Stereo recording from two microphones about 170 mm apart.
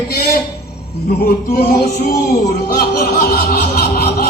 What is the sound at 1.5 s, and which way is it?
Music, 65° left (ahead or behind).